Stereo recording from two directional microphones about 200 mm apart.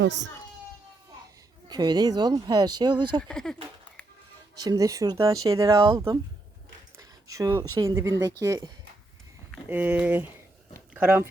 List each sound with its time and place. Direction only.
0.0 s a child's voice: 60° right (ahead or behind)
1.6 s speech: 20° right (ahead or behind)
3.2 s speech: 5° left (ahead or behind)
4.5 s speech: 20° right (ahead or behind)
7.0 s a sound: 15° right (ahead or behind)
7.8 s speech: 15° right (ahead or behind)